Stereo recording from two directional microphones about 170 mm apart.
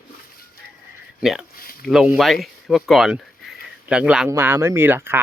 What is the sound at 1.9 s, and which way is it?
Speech, centre (ahead or behind).